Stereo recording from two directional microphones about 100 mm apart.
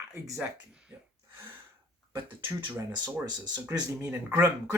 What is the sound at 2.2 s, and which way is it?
Speech, 50° right (ahead or behind).